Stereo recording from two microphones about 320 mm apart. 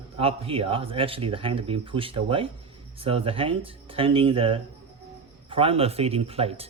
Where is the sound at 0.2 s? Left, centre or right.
Centre.